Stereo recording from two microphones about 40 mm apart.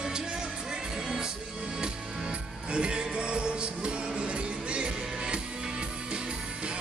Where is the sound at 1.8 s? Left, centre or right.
Right.